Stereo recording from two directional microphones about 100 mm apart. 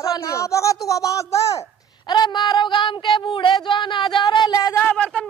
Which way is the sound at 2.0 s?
45° left (ahead or behind).